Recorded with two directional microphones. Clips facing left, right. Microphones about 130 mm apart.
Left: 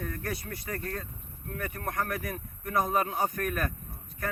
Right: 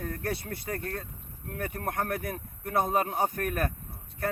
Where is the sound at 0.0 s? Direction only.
35° right (ahead or behind).